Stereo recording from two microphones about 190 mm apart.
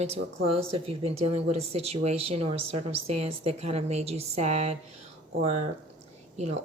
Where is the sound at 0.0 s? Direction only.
30° right (ahead or behind).